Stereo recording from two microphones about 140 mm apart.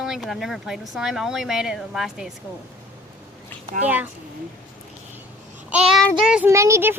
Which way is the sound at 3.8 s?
10° right (ahead or behind).